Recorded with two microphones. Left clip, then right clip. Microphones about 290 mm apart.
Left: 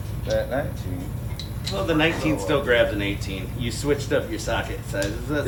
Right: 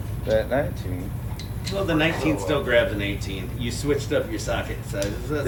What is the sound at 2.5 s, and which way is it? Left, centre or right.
Speech, centre.